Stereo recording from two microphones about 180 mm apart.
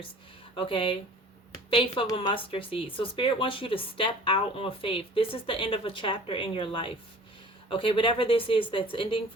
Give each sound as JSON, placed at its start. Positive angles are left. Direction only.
{"t": 0.5, "sound": "speech", "side_deg": 30}